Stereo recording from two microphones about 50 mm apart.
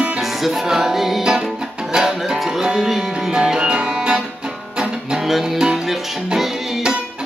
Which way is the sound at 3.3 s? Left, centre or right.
Centre.